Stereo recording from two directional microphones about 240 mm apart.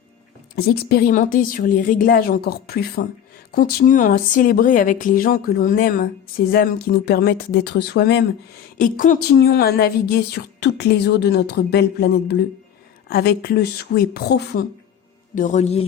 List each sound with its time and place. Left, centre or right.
0.5 s speech: left
15.4 s speech: left